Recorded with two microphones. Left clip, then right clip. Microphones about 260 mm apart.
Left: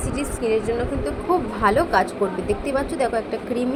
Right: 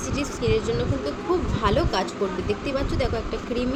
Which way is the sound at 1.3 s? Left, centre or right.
Centre.